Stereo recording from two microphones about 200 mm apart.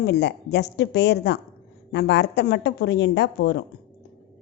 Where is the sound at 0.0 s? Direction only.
60° left (ahead or behind).